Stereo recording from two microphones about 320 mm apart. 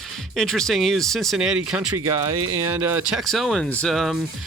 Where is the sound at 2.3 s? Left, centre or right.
Right.